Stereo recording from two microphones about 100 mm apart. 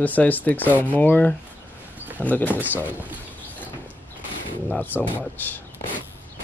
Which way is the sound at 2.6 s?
20° right (ahead or behind).